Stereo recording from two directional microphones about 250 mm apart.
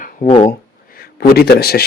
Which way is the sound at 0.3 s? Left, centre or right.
Left.